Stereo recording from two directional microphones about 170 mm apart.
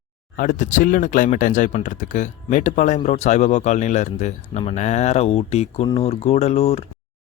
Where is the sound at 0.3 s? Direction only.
50° left (ahead or behind).